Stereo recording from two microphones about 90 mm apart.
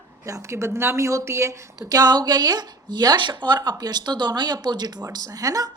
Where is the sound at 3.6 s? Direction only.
50° right (ahead or behind).